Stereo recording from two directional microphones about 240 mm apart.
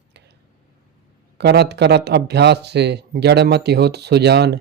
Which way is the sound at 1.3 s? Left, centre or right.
Right.